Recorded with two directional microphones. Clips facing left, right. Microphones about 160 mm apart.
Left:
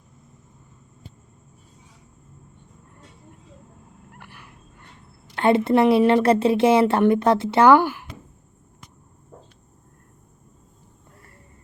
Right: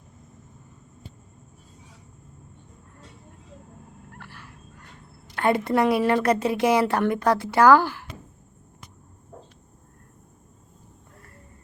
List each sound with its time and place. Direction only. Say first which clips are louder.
4.2 s fowl: even; 15° left (ahead or behind)
5.4 s a woman's voice: left 4 dB; 25° left (ahead or behind)